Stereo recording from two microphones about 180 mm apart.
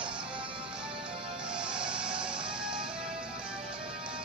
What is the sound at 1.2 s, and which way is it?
Music, 5° right (ahead or behind).